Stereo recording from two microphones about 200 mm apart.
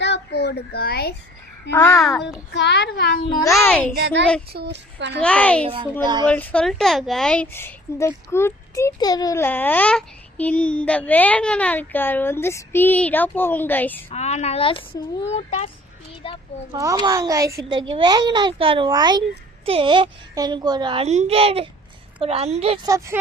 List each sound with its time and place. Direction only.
0.0 s a sound: 60° left (ahead or behind)
1.7 s a woman's voice: 15° left (ahead or behind)
2.0 s a child's voice: centre (ahead or behind)
2.5 s a woman's voice: 55° left (ahead or behind)
3.4 s a woman's voice: 15° left (ahead or behind)
3.9 s speech: 60° right (ahead or behind)
5.2 s a woman's voice: 5° left (ahead or behind)
5.6 s a child's voice: 25° right (ahead or behind)
6.2 s a woman's voice: 5° left (ahead or behind)
14.1 s a child's voice: 35° left (ahead or behind)
16.7 s a child's voice: 15° right (ahead or behind)
22.9 s speech: 15° right (ahead or behind)